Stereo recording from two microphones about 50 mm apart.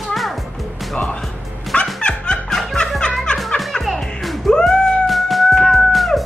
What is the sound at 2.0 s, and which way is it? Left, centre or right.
Music, centre.